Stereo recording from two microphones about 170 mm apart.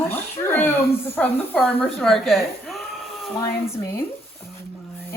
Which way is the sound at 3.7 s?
15° left (ahead or behind).